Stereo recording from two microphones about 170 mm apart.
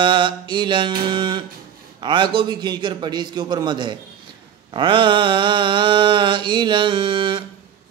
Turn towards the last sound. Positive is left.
turn(degrees=-30)  # may be behind; listen again after turning